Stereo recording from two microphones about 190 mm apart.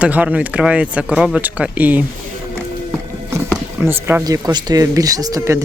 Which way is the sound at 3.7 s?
10° right (ahead or behind).